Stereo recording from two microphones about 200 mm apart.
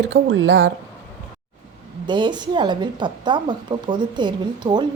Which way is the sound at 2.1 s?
20° right (ahead or behind).